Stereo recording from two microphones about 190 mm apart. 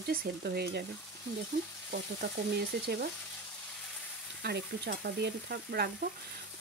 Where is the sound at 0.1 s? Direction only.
55° right (ahead or behind).